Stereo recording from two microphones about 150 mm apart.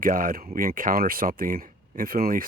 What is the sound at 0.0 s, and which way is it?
Speech, 70° right (ahead or behind).